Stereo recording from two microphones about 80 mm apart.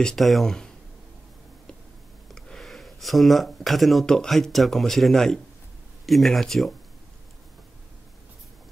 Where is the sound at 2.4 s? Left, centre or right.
Centre.